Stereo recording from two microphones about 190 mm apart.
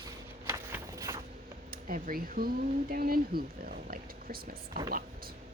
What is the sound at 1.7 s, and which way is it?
Speech, 50° right (ahead or behind).